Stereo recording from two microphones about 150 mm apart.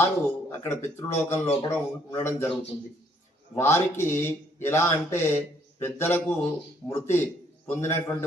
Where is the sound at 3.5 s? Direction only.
20° left (ahead or behind).